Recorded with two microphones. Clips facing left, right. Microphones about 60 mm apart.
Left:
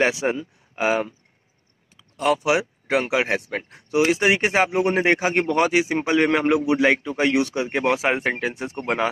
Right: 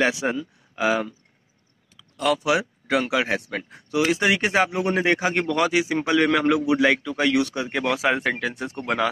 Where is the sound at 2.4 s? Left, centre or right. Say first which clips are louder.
Left 1 dB; centre.